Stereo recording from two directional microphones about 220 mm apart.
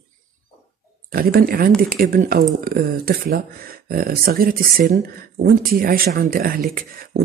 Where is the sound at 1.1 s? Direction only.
40° right (ahead or behind).